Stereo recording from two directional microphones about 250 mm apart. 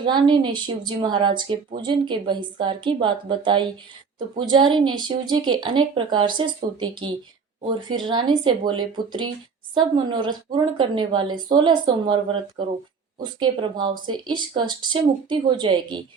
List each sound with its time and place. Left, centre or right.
0.0 s a woman's voice: centre